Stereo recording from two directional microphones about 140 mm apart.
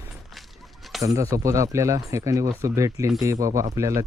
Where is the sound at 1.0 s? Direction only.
25° right (ahead or behind).